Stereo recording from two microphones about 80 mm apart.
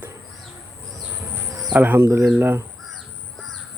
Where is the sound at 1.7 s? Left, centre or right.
Right.